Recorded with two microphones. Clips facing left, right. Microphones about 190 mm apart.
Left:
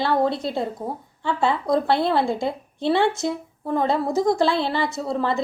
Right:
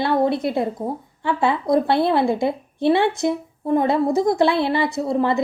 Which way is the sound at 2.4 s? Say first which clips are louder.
Right 5 dB; 55° right (ahead or behind).